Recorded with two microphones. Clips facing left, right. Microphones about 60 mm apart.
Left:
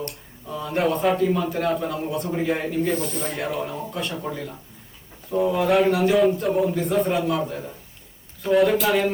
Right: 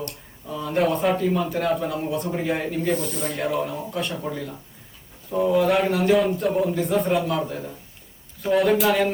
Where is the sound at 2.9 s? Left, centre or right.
Left.